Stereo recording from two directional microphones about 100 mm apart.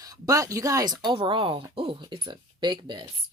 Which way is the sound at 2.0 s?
50° right (ahead or behind).